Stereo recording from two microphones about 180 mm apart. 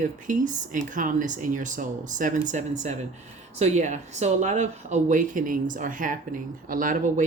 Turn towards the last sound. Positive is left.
turn(degrees=-45)  # may be behind; listen again after turning